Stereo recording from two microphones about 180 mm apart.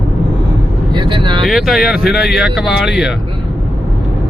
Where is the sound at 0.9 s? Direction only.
25° right (ahead or behind).